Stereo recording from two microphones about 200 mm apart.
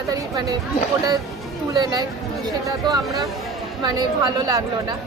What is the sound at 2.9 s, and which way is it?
Speech, 15° right (ahead or behind).